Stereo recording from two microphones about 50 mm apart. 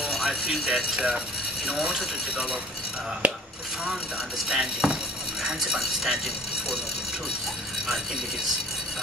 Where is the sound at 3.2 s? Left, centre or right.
Right.